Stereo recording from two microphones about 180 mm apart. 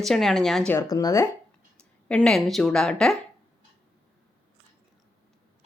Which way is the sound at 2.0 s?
5° left (ahead or behind).